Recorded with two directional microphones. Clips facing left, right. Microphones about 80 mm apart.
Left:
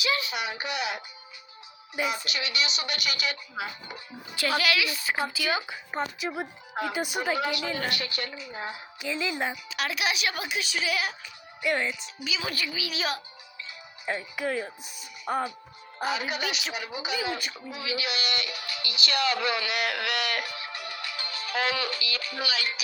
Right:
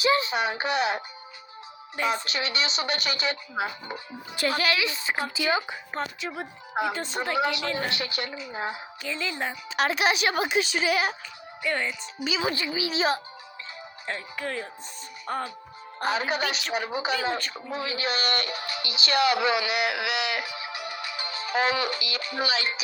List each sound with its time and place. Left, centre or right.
0.0 s speech: right
2.0 s speech: right
5.9 s a woman's voice: centre
7.8 s speech: right
9.0 s a woman's voice: centre
9.6 s speech: right
11.6 s a woman's voice: centre
12.2 s speech: right
14.1 s a woman's voice: centre
16.0 s speech: right; by 19.6 s centre
19.6 s music: centre; by 22.8 s right